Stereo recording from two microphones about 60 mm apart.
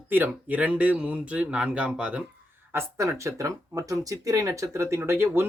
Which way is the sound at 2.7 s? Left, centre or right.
Right.